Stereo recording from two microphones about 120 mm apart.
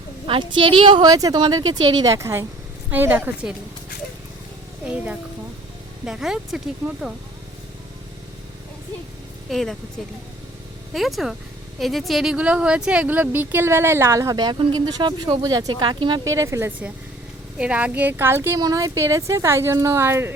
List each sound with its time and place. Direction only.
0.3 s speech: 45° right (ahead or behind); by 3.5 s 15° right (ahead or behind)
6.1 s speech: 5° right (ahead or behind)
9.5 s speech: centre (ahead or behind)
10.9 s speech: centre (ahead or behind); by 16.2 s 40° right (ahead or behind)
16.2 s speech: 25° right (ahead or behind)
17.6 s speech: 10° right (ahead or behind)